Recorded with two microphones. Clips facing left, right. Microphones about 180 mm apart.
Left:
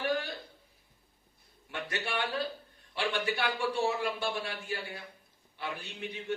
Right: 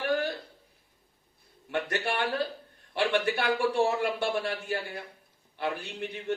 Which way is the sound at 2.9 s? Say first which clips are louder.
Right 6 dB; 55° right (ahead or behind).